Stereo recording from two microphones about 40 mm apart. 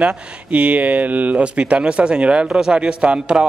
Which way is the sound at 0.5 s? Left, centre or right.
Right.